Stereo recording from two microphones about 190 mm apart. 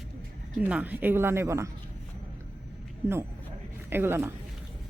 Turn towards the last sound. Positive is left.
turn(degrees=-10)  # may be behind; listen again after turning